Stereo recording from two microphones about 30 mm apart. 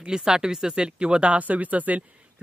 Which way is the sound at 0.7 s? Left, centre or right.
Right.